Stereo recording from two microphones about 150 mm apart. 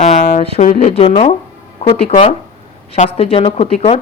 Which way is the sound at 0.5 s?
45° left (ahead or behind).